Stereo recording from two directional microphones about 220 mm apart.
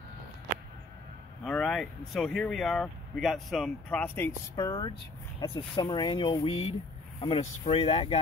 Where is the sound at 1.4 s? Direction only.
Centre (ahead or behind).